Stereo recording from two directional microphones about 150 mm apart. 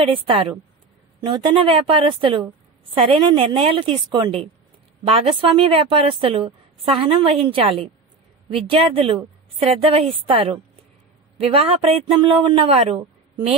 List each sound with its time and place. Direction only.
0.0 s a woman's voice: 35° right (ahead or behind)